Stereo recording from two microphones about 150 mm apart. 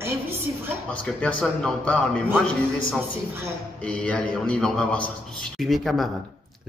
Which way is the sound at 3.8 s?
10° left (ahead or behind).